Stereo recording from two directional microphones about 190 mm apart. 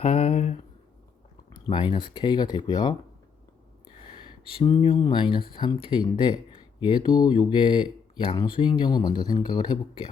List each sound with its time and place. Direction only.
0.0 s a sound: 30° left (ahead or behind)
1.5 s speech: 25° left (ahead or behind)
4.2 s speech: 25° left (ahead or behind)